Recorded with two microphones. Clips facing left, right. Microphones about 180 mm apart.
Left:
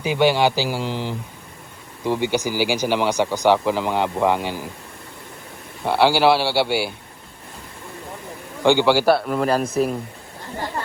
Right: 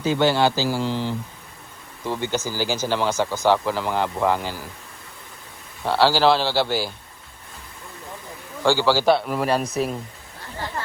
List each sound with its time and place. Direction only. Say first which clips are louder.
0.0 s speech: left 1 dB; 15° left (ahead or behind)
5.8 s speech: left 2 dB; 15° left (ahead or behind)
8.6 s speech: left 3 dB; 15° left (ahead or behind)
9.0 s speech: left 1 dB; centre (ahead or behind)